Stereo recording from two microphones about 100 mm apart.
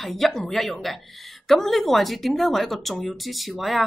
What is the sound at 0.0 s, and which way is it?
A woman's voice, 5° left (ahead or behind).